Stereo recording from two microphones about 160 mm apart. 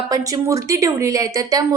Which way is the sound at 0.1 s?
20° right (ahead or behind).